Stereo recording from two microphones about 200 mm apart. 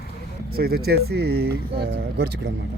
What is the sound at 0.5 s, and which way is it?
Speech, 50° right (ahead or behind).